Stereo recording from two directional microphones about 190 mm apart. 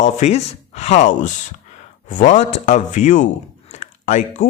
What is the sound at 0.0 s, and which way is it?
Speech, 35° left (ahead or behind).